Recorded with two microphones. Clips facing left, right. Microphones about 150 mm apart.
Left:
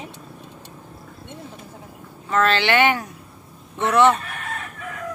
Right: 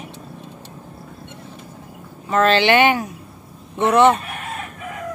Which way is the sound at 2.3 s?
20° right (ahead or behind).